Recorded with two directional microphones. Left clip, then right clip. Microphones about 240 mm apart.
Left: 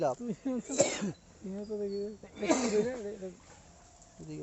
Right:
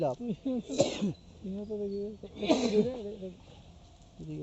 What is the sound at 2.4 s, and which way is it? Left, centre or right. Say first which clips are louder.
Speech: right 1 dB; left.